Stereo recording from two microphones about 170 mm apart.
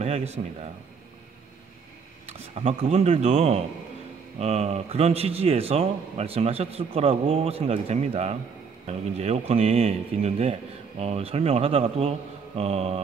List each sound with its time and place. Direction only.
0.0 s speech: 40° right (ahead or behind)
2.2 s speech: 40° right (ahead or behind)